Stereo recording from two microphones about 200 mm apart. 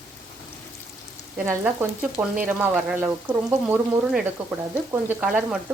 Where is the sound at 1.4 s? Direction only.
10° right (ahead or behind).